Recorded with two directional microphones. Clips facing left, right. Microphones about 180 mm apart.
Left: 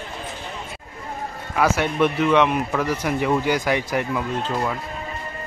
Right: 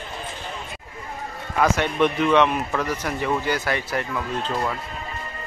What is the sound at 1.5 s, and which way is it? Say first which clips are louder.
Speech: left 1 dB; 5° left (ahead or behind).